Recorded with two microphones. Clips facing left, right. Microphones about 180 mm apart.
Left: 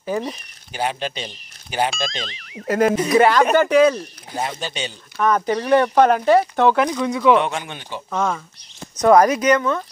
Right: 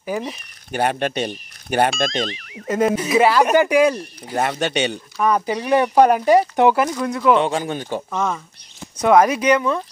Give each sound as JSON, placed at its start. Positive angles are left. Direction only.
{"t": 0.0, "sound": "speech", "side_deg": -10}
{"t": 0.7, "sound": "speech", "side_deg": -60}
{"t": 2.0, "sound": "speech", "side_deg": 0}
{"t": 4.4, "sound": "speech", "side_deg": -65}
{"t": 5.2, "sound": "speech", "side_deg": -10}
{"t": 6.8, "sound": "speech", "side_deg": 0}
{"t": 7.3, "sound": "speech", "side_deg": -35}
{"t": 8.1, "sound": "speech", "side_deg": 0}